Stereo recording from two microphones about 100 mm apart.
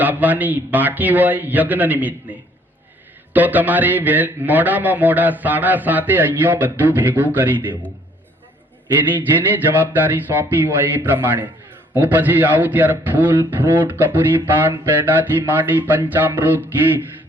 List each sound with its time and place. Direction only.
0.0 s a man's voice: 15° right (ahead or behind)
3.3 s a man's voice: 15° right (ahead or behind)
9.7 s a man's voice: 20° right (ahead or behind)